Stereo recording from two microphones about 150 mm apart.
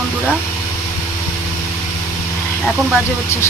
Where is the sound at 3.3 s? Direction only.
15° left (ahead or behind).